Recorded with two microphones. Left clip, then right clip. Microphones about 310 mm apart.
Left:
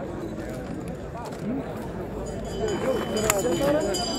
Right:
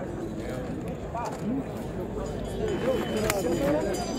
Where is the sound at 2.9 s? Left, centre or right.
Centre.